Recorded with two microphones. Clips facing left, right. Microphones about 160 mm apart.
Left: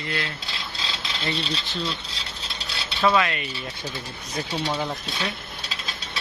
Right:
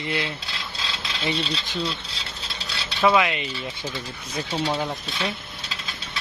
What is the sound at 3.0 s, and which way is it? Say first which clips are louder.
Speech: right 2 dB; 15° right (ahead or behind).